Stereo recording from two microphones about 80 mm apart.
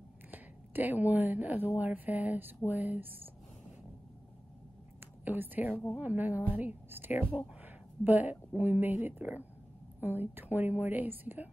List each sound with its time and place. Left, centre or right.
0.3 s speech: right
5.2 s a woman's voice: right